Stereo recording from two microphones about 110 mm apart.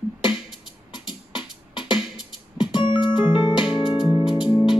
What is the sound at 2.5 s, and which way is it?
Music, 45° left (ahead or behind).